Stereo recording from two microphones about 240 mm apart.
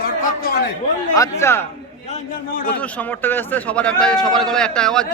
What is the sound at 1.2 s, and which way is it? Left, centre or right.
Speech, centre.